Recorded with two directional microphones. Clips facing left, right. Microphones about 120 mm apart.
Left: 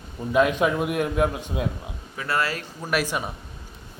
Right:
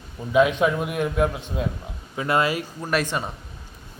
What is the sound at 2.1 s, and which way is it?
Speech, 20° right (ahead or behind).